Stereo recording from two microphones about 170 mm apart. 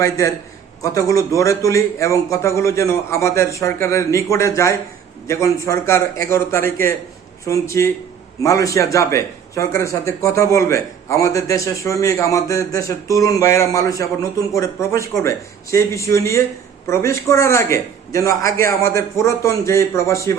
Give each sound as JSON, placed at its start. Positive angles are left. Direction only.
{"t": 0.8, "sound": "a man's voice", "side_deg": 20}